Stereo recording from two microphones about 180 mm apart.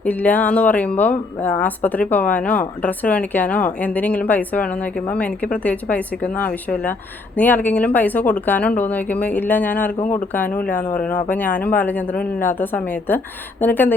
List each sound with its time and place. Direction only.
0.0 s speech: 10° left (ahead or behind)